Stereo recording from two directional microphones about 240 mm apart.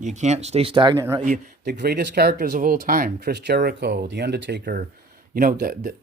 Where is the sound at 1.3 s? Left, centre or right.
Right.